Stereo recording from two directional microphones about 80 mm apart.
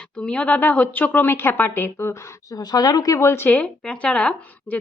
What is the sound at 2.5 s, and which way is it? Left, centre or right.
Speech, left.